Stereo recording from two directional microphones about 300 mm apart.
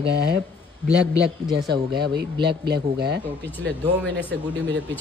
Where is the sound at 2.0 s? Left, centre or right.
Right.